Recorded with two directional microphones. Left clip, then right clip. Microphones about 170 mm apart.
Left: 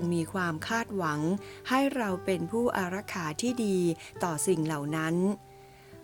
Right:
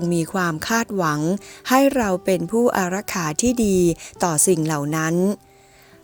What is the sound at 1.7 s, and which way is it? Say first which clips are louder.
Speech: right 11 dB; 40° right (ahead or behind).